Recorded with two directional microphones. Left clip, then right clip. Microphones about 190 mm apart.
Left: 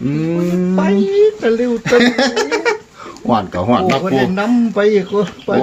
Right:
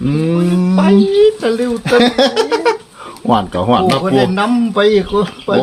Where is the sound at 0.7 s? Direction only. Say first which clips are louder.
Right 3 dB; 5° right (ahead or behind).